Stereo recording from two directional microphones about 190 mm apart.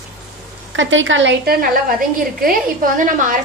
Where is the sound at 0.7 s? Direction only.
85° right; by 1.7 s 60° right (ahead or behind).